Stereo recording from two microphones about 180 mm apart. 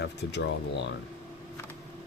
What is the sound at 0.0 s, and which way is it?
Speech, 70° left (ahead or behind).